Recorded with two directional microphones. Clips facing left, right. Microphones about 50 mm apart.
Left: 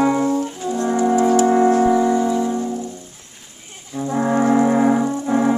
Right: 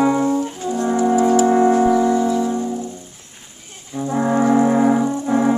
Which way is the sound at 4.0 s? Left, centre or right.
Centre.